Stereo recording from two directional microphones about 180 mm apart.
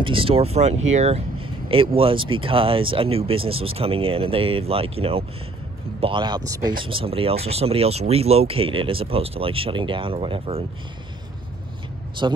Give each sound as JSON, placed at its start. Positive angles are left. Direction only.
{"t": 0.0, "sound": "speech", "side_deg": -30}
{"t": 12.2, "sound": "speech", "side_deg": -25}